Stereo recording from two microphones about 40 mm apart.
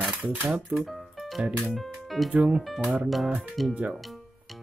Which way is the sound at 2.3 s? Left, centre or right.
Right.